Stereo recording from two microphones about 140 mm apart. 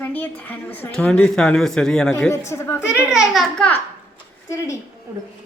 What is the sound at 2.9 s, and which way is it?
Speech, 5° right (ahead or behind).